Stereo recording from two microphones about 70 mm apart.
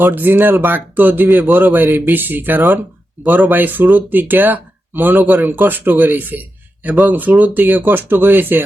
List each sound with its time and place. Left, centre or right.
0.0 s speech: right